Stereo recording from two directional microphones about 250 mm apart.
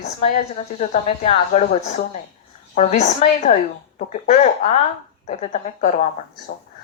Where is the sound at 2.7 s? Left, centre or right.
Left.